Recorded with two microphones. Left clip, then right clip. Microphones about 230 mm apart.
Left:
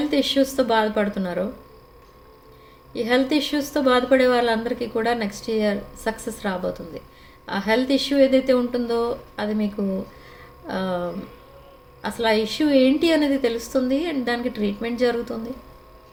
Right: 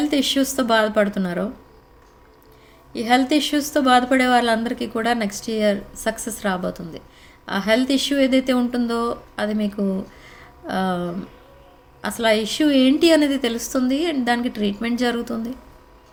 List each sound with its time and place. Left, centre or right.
0.1 s a woman's voice: right
2.9 s a woman's voice: right
10.2 s a sound: right
12.0 s a woman's voice: right